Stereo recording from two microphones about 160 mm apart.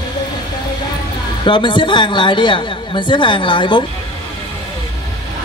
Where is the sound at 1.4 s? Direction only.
30° left (ahead or behind).